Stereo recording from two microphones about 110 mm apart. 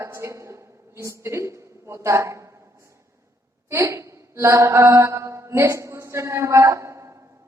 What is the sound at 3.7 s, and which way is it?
Mantra, 25° right (ahead or behind).